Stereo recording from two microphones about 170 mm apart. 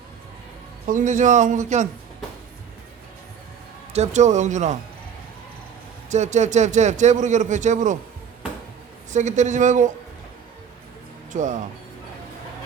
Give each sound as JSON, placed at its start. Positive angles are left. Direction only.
{"t": 0.9, "sound": "a man's voice", "side_deg": -50}
{"t": 3.9, "sound": "a man's voice", "side_deg": -40}
{"t": 6.1, "sound": "a man's voice", "side_deg": -45}
{"t": 9.1, "sound": "a man's voice", "side_deg": -45}
{"t": 11.3, "sound": "a man's voice", "side_deg": -45}